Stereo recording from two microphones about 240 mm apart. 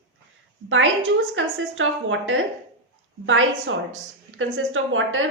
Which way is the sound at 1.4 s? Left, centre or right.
Right.